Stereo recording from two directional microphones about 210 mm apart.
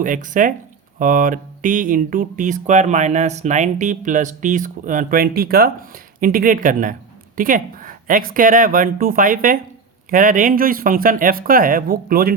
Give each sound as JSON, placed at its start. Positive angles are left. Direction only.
{"t": 0.0, "sound": "speech", "side_deg": -40}